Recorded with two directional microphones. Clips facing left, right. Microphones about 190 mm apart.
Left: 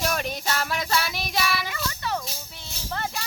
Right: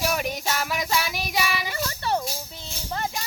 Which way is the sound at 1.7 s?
35° right (ahead or behind).